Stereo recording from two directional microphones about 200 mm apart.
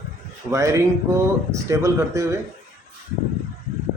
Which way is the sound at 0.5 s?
15° right (ahead or behind).